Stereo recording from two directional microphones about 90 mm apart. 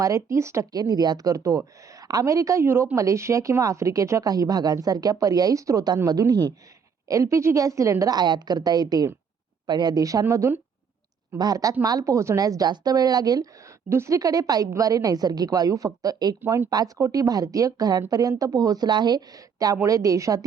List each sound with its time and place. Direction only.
0.0 s a woman's voice: 35° right (ahead or behind)
0.7 s a woman's voice: 50° right (ahead or behind)
7.1 s a woman's voice: 35° right (ahead or behind)
13.9 s speech: 30° right (ahead or behind)
14.2 s a woman's voice: 45° right (ahead or behind)